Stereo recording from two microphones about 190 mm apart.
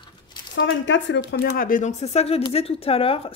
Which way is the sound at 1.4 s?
50° left (ahead or behind).